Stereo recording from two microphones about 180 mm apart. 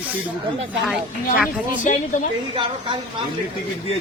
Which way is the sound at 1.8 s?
45° left (ahead or behind).